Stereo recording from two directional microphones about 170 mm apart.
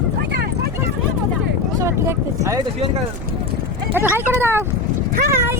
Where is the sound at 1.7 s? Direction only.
15° right (ahead or behind).